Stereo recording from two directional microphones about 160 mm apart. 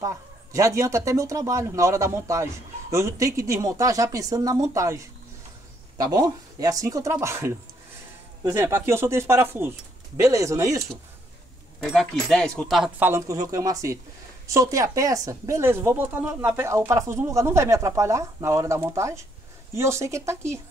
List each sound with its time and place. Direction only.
0.0 s speech: 20° right (ahead or behind)
11.8 s speech: centre (ahead or behind)
13.0 s speech: 15° right (ahead or behind)